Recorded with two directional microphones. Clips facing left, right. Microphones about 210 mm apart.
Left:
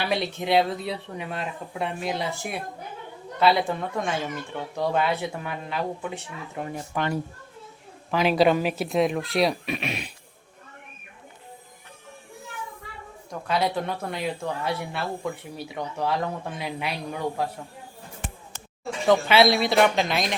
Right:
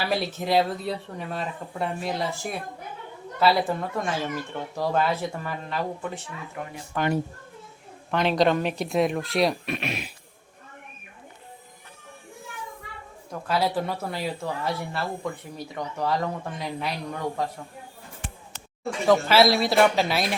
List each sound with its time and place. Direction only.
0.0 s speech: centre (ahead or behind)
6.6 s speech: 25° left (ahead or behind)
6.9 s speech: 10° left (ahead or behind)
8.1 s speech: 5° left (ahead or behind)
13.5 s speech: 5° right (ahead or behind)
19.0 s speech: centre (ahead or behind)